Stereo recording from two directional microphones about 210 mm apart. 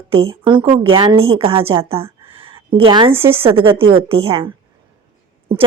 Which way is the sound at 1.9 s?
25° right (ahead or behind).